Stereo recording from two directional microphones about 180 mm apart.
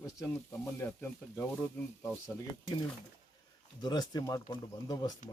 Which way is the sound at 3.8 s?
25° left (ahead or behind).